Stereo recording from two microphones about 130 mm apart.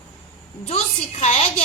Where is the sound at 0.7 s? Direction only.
55° left (ahead or behind).